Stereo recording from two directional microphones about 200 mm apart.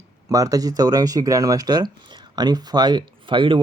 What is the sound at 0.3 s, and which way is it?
Speech, 15° right (ahead or behind).